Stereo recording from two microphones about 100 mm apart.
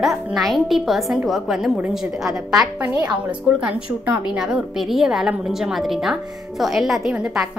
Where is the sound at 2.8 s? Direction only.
15° right (ahead or behind).